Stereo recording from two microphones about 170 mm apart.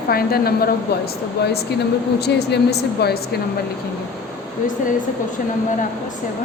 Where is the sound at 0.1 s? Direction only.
65° left (ahead or behind).